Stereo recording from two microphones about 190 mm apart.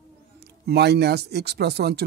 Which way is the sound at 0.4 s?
60° right (ahead or behind).